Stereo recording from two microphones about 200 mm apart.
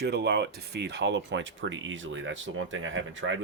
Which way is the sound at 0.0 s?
55° right (ahead or behind).